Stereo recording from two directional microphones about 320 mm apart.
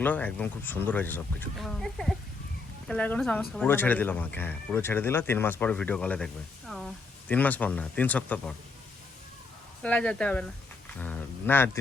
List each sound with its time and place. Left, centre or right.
0.0 s speech: centre
9.8 s speech: centre